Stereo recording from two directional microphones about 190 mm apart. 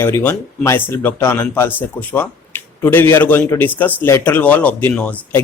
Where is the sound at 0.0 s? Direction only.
10° left (ahead or behind).